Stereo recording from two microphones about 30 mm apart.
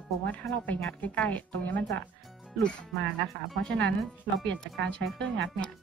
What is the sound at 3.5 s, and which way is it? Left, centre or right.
Speech, centre.